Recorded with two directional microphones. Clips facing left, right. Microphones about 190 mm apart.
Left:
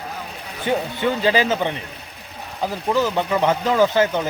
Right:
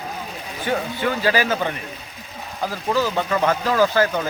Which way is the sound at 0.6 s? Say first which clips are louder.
Left 2 dB; 20° left (ahead or behind).